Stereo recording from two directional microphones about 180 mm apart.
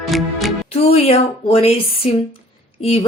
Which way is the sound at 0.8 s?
35° left (ahead or behind).